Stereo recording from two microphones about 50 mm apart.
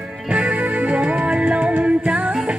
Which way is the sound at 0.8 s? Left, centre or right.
Right.